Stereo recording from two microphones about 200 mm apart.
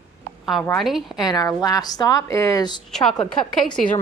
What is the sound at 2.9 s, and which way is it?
Speech, centre (ahead or behind).